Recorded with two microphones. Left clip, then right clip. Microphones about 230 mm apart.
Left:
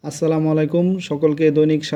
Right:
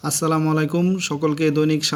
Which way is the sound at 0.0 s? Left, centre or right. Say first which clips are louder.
Left 2 dB; centre.